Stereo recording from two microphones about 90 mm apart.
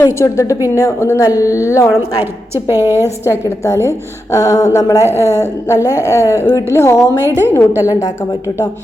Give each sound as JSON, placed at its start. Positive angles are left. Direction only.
{"t": 0.0, "sound": "a woman's voice", "side_deg": 35}
{"t": 2.6, "sound": "a woman's voice", "side_deg": -25}
{"t": 3.2, "sound": "a woman's voice", "side_deg": 35}